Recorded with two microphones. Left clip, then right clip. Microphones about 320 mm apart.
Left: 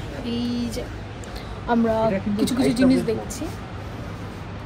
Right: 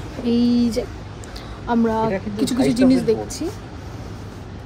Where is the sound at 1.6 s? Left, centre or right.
Centre.